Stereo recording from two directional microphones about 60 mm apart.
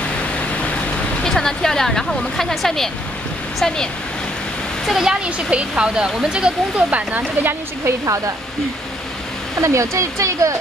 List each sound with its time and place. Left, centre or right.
1.2 s speech: centre
4.8 s speech: centre
5.2 s speech: centre
6.9 s speech: right
9.6 s speech: right